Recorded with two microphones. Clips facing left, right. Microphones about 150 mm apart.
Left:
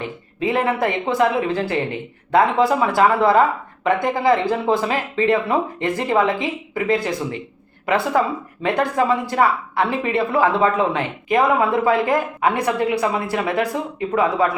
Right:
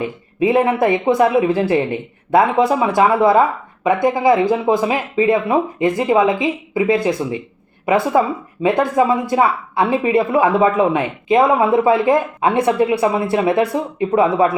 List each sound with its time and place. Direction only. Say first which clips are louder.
0.3 s speech: right 5 dB; 20° right (ahead or behind)